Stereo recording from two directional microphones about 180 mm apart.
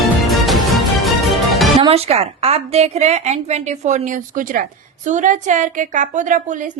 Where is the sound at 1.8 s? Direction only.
35° right (ahead or behind).